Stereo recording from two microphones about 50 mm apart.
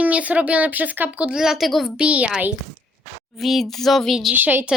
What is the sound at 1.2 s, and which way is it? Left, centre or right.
Speech, centre.